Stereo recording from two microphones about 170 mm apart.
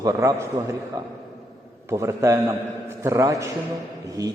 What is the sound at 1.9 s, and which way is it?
A man's voice, 15° right (ahead or behind).